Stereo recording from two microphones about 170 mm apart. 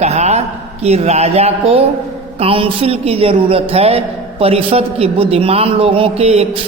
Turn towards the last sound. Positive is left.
turn(degrees=-35)  # may be behind; listen again after turning